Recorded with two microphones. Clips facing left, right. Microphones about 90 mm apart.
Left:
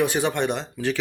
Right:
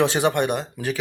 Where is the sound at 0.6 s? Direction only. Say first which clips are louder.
Left 1 dB; 45° right (ahead or behind).